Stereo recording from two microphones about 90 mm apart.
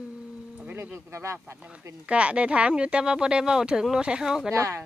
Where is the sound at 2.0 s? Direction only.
15° right (ahead or behind).